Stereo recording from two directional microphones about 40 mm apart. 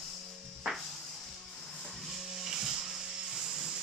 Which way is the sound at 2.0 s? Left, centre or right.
Centre.